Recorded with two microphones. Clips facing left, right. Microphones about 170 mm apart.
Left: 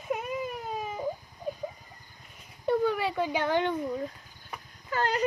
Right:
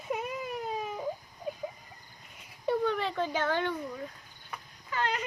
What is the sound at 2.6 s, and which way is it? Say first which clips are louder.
A child's voice: left 3 dB; 5° left (ahead or behind).